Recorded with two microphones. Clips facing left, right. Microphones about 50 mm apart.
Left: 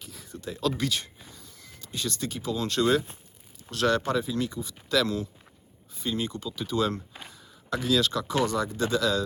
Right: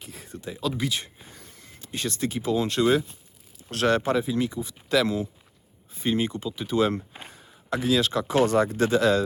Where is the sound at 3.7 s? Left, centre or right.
Right.